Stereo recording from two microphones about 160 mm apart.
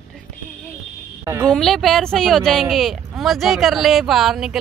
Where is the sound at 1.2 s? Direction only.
20° right (ahead or behind).